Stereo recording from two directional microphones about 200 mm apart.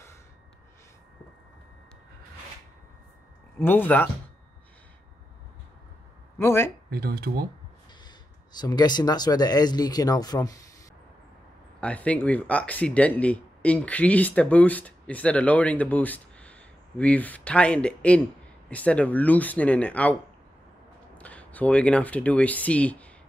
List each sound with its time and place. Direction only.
3.5 s speech: 10° left (ahead or behind)
6.3 s speech: 10° left (ahead or behind)
6.9 s speech: 50° right (ahead or behind)
8.5 s speech: 20° left (ahead or behind)
11.8 s speech: 5° left (ahead or behind)
21.2 s speech: 5° left (ahead or behind)